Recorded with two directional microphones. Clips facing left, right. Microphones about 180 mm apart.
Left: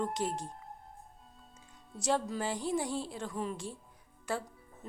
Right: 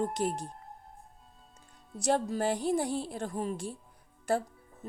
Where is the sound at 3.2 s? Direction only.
40° right (ahead or behind).